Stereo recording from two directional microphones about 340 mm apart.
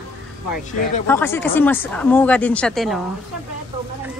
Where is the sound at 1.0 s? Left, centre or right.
Centre.